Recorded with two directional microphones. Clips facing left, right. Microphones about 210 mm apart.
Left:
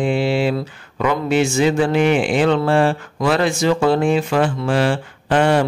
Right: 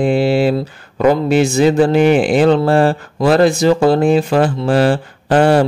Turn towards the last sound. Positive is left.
turn(degrees=-35)  # may be behind; listen again after turning